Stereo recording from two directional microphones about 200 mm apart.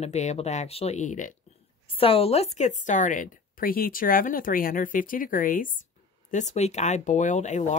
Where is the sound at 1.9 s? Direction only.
30° left (ahead or behind).